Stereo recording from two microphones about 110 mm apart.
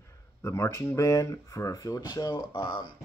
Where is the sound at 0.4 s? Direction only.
25° left (ahead or behind).